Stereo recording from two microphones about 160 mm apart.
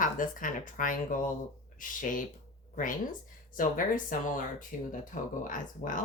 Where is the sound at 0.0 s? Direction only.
55° left (ahead or behind).